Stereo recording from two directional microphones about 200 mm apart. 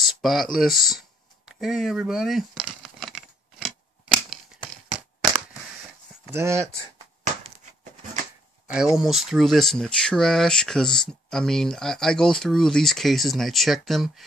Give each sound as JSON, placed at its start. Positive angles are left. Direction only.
{"t": 0.0, "sound": "a sound", "side_deg": 0}
{"t": 6.3, "sound": "speech", "side_deg": -15}
{"t": 8.6, "sound": "speech", "side_deg": -5}